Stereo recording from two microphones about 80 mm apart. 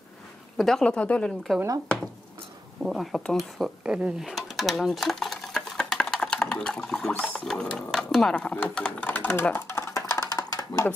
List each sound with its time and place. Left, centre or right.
0.6 s speech: centre
0.8 s speech: centre
2.8 s speech: centre
3.8 s speech: centre; by 9.9 s left
9.9 s music: left